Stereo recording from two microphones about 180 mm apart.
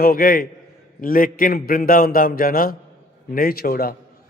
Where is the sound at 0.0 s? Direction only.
55° left (ahead or behind).